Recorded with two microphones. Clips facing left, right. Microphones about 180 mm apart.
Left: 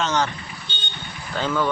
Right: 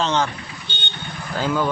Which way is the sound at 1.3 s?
10° right (ahead or behind).